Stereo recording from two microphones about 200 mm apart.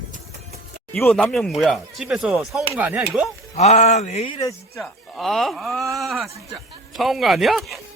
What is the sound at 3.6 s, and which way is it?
Speech, 35° left (ahead or behind).